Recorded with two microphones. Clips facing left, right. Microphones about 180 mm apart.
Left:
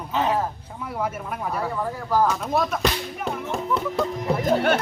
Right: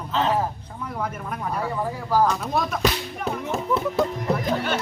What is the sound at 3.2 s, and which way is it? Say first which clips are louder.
Music: right 1 dB; 5° left (ahead or behind).